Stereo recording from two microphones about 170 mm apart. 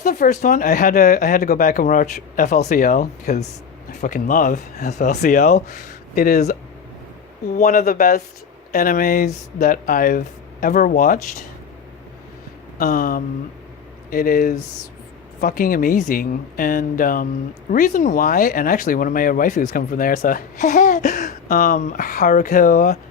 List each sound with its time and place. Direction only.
0.0 s speech: 45° left (ahead or behind)
7.5 s speech: 50° left (ahead or behind)
12.8 s speech: 55° left (ahead or behind)